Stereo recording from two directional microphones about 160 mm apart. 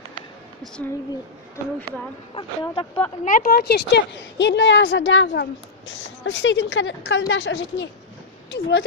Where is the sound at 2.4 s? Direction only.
35° left (ahead or behind).